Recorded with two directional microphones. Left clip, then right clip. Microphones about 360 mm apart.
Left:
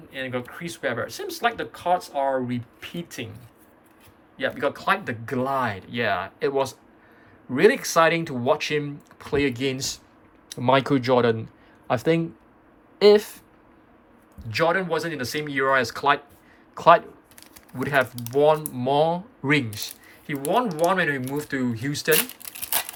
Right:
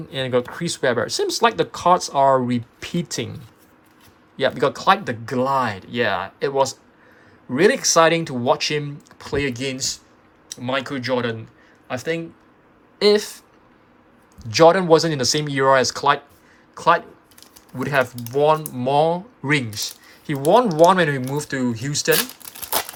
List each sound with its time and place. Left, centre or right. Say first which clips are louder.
0.1 s speech: right 9 dB; centre
4.4 s speech: right 6 dB; centre